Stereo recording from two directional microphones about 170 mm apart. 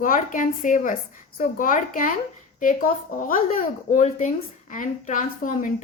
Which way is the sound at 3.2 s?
55° left (ahead or behind).